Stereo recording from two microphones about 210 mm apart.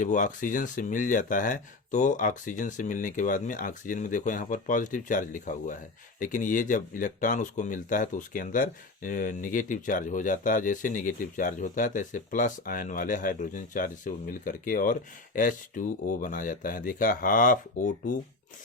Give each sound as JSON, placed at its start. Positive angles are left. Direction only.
{"t": 0.0, "sound": "speech", "side_deg": 35}